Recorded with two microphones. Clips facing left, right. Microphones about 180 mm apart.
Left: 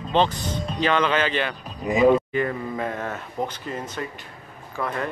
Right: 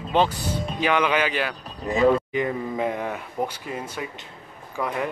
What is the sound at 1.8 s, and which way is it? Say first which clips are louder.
Speech: left 2 dB; 10° left (ahead or behind).